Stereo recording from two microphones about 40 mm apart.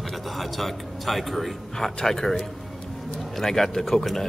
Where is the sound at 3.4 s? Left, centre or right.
Centre.